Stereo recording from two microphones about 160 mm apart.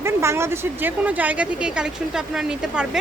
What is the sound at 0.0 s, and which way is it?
A woman's voice, 15° right (ahead or behind).